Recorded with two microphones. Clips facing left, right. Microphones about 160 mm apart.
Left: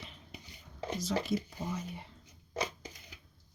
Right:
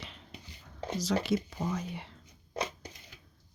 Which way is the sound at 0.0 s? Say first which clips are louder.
Right 3 dB; 85° right.